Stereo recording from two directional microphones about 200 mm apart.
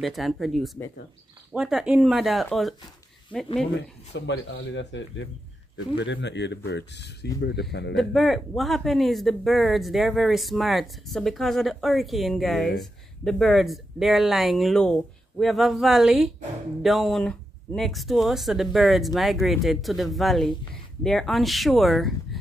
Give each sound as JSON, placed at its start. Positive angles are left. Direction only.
{"t": 0.0, "sound": "speech", "side_deg": 0}
{"t": 4.1, "sound": "speech", "side_deg": 65}
{"t": 7.9, "sound": "speech", "side_deg": 0}